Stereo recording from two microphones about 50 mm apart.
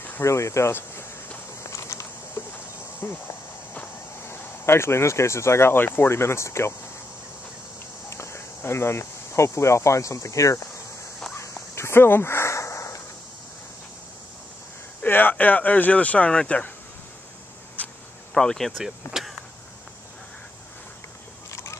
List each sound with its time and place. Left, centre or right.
0.2 s speech: left
1.6 s a sound: left
3.0 s cricket: left
4.2 s speech: left
8.1 s speech: left
11.5 s a sound: left
15.0 s speech: left
16.3 s speech: centre
17.8 s a sound: left
18.3 s speech: centre
18.8 s speech: centre
21.5 s a sound: left